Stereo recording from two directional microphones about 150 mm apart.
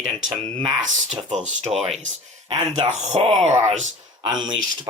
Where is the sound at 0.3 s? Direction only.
10° left (ahead or behind).